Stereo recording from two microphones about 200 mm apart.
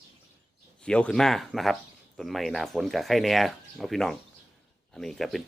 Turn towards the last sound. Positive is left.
turn(degrees=0)  # may be behind; listen again after turning